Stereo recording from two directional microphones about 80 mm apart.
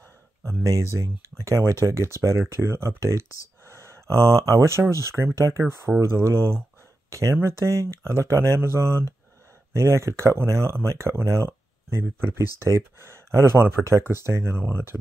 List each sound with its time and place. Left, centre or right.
0.4 s speech: right